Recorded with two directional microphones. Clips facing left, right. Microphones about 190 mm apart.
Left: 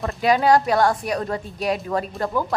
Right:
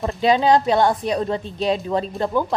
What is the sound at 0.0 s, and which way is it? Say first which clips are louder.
A woman's voice: right 1 dB; 20° right (ahead or behind).